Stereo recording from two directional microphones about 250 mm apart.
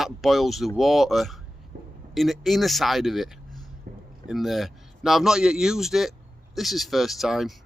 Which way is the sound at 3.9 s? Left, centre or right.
Right.